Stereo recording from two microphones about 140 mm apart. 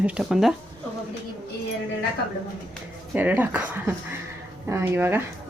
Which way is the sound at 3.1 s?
10° right (ahead or behind).